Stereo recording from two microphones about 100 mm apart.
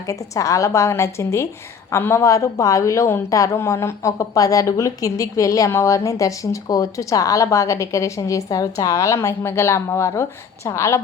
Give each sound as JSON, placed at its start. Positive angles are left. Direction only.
{"t": 0.1, "sound": "a woman's voice", "side_deg": 35}